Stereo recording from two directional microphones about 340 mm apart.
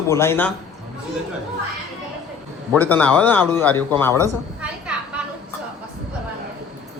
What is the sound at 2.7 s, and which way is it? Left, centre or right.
Speech, centre.